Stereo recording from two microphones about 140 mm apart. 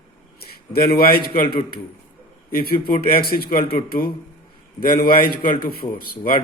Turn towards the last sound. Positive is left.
turn(degrees=90)